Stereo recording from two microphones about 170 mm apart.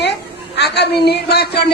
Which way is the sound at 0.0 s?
80° left.